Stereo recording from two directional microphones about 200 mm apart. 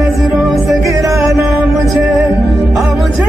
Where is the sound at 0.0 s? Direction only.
Centre (ahead or behind).